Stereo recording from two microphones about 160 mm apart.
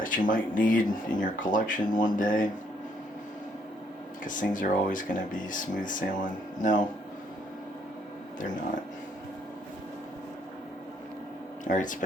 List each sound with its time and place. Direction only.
0.0 s speech: 55° left (ahead or behind)
4.2 s speech: 55° left (ahead or behind)
11.6 s speech: 55° left (ahead or behind)